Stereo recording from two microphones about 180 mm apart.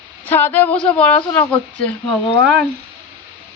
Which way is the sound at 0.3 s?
10° left (ahead or behind).